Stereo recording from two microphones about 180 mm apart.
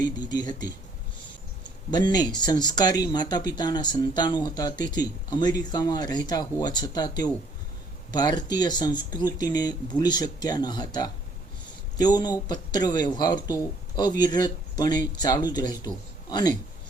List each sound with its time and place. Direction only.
0.3 s speech: 25° left (ahead or behind)
1.9 s speech: 25° left (ahead or behind)